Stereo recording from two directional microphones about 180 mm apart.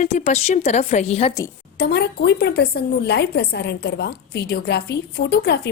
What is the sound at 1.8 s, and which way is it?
A woman's voice, 65° left (ahead or behind).